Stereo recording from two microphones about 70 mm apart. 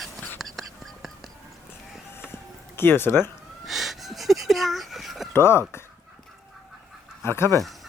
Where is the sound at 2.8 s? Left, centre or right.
Left.